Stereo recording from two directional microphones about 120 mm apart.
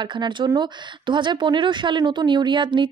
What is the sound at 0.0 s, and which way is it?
A woman's voice, 40° right (ahead or behind).